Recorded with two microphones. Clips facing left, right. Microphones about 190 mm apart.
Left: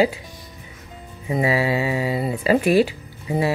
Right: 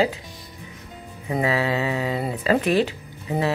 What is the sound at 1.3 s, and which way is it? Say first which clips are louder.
Speech: left 2 dB; 10° left (ahead or behind).